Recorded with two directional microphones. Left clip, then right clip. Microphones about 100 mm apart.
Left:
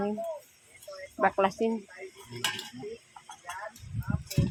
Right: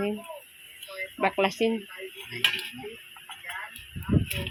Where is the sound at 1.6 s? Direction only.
25° right (ahead or behind).